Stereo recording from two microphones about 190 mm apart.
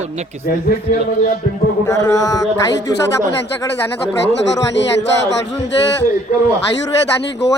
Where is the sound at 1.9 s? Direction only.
20° left (ahead or behind).